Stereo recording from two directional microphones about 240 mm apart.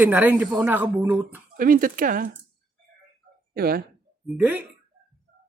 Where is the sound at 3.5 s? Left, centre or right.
Right.